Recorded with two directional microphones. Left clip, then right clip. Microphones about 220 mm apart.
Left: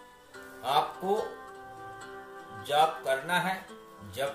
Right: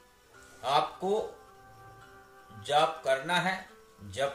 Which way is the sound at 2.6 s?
15° right (ahead or behind).